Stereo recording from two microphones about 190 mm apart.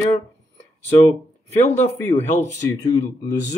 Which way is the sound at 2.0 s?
10° left (ahead or behind).